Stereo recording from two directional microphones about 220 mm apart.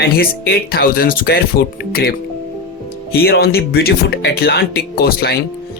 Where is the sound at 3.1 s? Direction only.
45° left (ahead or behind).